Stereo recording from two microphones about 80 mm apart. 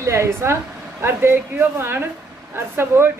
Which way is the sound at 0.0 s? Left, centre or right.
Right.